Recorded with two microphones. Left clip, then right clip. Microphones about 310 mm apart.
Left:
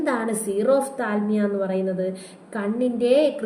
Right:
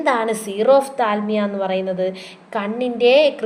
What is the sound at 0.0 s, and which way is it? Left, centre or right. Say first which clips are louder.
A woman's voice: right 6 dB; right.